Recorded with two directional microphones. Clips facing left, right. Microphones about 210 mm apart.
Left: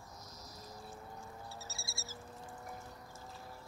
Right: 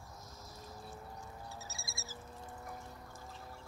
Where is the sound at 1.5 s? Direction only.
15° right (ahead or behind).